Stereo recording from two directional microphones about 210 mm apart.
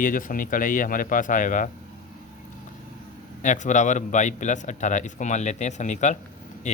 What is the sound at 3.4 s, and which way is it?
Speech, 35° left (ahead or behind).